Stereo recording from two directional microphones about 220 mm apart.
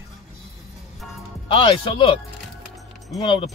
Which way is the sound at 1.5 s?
25° left (ahead or behind).